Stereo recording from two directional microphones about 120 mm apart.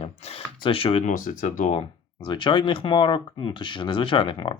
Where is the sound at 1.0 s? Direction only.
90° left.